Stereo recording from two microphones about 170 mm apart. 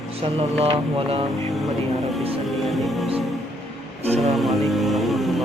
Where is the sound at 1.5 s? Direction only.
Centre (ahead or behind).